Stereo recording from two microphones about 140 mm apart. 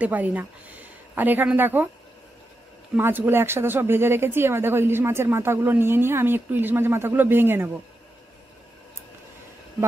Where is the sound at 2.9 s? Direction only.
15° right (ahead or behind).